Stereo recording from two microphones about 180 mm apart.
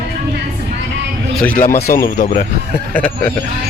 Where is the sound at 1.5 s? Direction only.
45° left (ahead or behind).